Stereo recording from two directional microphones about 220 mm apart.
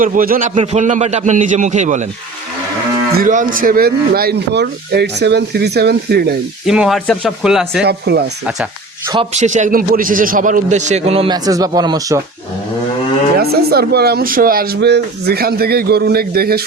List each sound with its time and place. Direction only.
0.0 s a man's voice: 40° right (ahead or behind)
3.2 s speech: 35° right (ahead or behind)
6.7 s speech: centre (ahead or behind)
7.9 s speech: 50° right (ahead or behind)
9.0 s a man's voice: 25° right (ahead or behind)
13.3 s speech: 45° right (ahead or behind)